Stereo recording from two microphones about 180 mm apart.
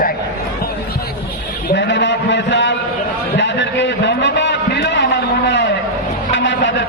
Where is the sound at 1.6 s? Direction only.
80° left.